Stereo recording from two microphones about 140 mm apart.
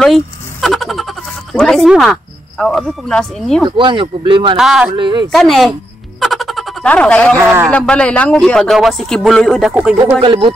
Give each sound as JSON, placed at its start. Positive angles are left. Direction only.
{"t": 0.0, "sound": "speech", "side_deg": 0}
{"t": 3.6, "sound": "speech", "side_deg": -35}
{"t": 4.6, "sound": "speech", "side_deg": -5}
{"t": 4.9, "sound": "speech", "side_deg": -35}
{"t": 5.3, "sound": "music", "side_deg": 0}
{"t": 6.9, "sound": "speech", "side_deg": 10}
{"t": 7.3, "sound": "speech", "side_deg": -20}
{"t": 7.7, "sound": "speech", "side_deg": 5}
{"t": 10.2, "sound": "speech", "side_deg": -35}